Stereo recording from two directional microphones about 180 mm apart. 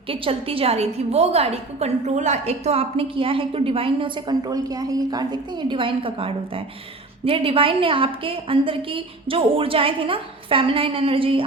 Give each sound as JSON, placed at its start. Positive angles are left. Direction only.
{"t": 0.1, "sound": "a woman's voice", "side_deg": -30}